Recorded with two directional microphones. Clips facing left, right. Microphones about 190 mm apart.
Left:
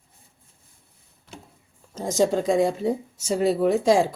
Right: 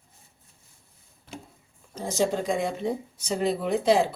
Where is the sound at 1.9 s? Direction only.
45° left (ahead or behind).